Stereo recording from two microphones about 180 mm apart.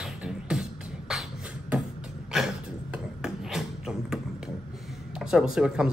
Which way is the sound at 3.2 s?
5° right (ahead or behind).